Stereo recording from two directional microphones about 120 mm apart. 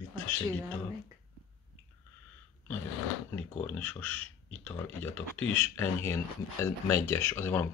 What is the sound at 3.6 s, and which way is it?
Speech, 15° left (ahead or behind).